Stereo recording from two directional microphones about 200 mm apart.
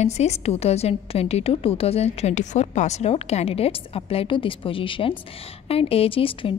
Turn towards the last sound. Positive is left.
turn(degrees=25)  # may be behind; listen again after turning